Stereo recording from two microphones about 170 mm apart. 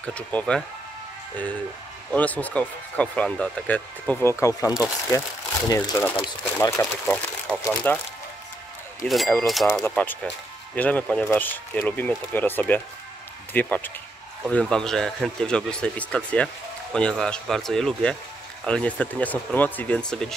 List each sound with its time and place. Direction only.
0.0 s speech: 10° left (ahead or behind)
2.1 s speech: 10° left (ahead or behind)
7.1 s speech: centre (ahead or behind)
7.6 s speech: 10° left (ahead or behind)
9.0 s speech: centre (ahead or behind)